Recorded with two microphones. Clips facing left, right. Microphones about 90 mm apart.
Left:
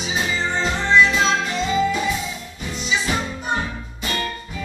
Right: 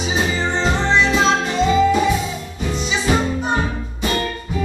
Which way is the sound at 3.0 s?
25° right (ahead or behind).